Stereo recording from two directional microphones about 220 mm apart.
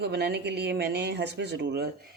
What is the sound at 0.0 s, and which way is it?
Speech, 50° right (ahead or behind).